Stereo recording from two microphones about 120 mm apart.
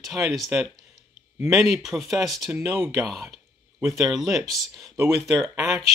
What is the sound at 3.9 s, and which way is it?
Speech, centre (ahead or behind).